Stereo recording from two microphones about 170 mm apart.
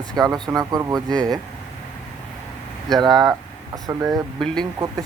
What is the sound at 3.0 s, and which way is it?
Speech, 25° right (ahead or behind).